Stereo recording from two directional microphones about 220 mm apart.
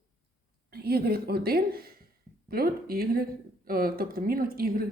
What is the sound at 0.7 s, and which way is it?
A woman's voice, 45° right (ahead or behind).